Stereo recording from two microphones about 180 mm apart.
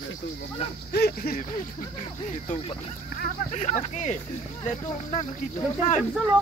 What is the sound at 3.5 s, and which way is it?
Speech, 40° left (ahead or behind).